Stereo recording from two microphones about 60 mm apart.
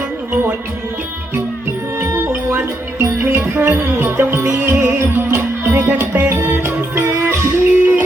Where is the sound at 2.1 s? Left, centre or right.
Right.